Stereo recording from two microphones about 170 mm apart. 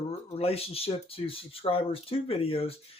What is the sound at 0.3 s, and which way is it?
Speech, 35° left (ahead or behind).